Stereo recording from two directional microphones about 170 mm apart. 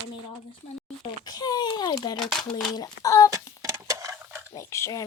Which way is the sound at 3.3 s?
20° right (ahead or behind).